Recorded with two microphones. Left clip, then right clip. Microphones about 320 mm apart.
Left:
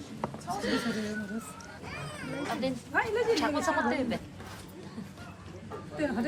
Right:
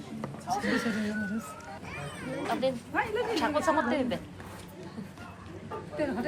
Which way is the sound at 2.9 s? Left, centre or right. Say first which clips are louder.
Left 4 dB; left.